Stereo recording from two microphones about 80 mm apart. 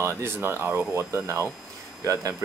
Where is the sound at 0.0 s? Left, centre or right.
Right.